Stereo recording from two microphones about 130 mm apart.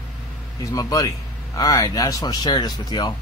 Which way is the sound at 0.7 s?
25° left (ahead or behind).